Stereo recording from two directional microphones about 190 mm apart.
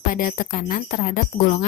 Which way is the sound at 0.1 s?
45° left (ahead or behind).